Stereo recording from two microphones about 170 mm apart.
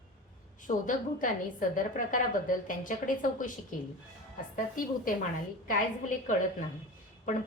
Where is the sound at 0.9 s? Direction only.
50° left (ahead or behind).